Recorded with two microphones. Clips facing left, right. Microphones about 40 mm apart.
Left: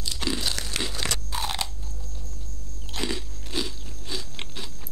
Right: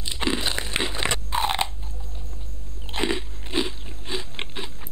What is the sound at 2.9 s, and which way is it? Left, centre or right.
Biting, right.